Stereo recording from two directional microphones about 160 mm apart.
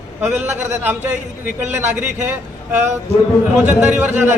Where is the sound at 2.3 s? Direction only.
15° right (ahead or behind).